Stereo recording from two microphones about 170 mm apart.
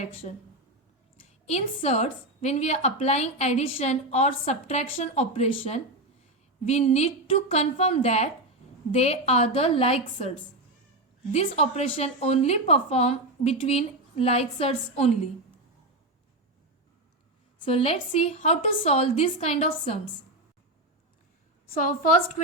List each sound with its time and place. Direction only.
0.0 s a woman's voice: 40° left (ahead or behind)
1.5 s a woman's voice: 40° left (ahead or behind)
17.7 s a woman's voice: 35° left (ahead or behind)
21.7 s a woman's voice: 50° left (ahead or behind)